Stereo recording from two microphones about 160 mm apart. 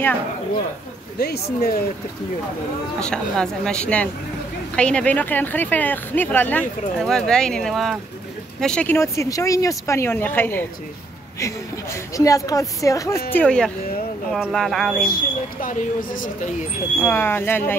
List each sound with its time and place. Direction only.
1.2 s speech: 85° left
3.0 s speech: 5° left (ahead or behind)
8.9 s a woman's voice: 20° left (ahead or behind)
13.3 s speech: 10° left (ahead or behind)
15.0 s speech: 60° left (ahead or behind)
17.0 s speech: 15° left (ahead or behind)